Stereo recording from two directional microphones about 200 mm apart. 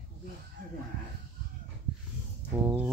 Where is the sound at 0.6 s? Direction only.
45° right (ahead or behind).